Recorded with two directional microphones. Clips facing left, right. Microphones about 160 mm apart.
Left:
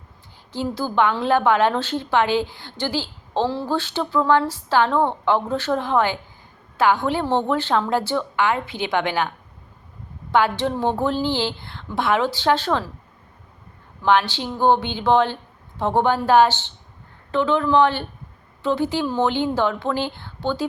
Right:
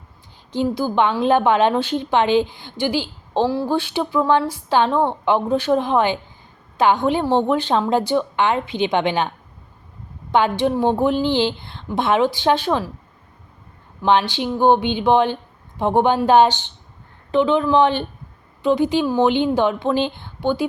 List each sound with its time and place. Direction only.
0.5 s a woman's voice: 15° right (ahead or behind)
10.3 s a woman's voice: 15° right (ahead or behind)
14.0 s a woman's voice: 20° right (ahead or behind)